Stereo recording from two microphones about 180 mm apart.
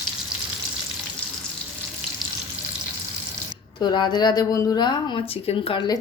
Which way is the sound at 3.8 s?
25° left (ahead or behind).